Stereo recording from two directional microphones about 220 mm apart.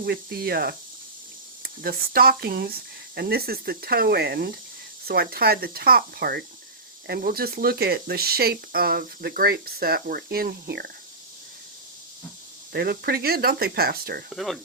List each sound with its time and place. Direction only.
0.0 s speech: 45° right (ahead or behind)
12.7 s speech: 45° right (ahead or behind)
14.3 s speech: centre (ahead or behind)